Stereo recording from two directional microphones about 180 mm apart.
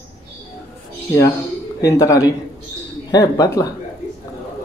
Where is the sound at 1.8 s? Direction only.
20° left (ahead or behind).